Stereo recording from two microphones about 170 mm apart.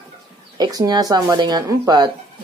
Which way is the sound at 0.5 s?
25° right (ahead or behind).